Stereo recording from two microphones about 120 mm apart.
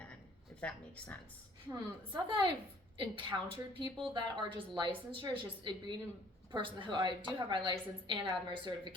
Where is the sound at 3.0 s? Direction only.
45° right (ahead or behind).